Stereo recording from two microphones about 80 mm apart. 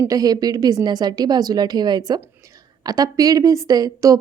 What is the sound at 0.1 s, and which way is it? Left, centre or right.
A woman's voice, right.